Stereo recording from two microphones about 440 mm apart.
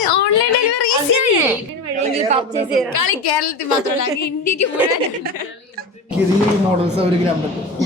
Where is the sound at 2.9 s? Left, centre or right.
Left.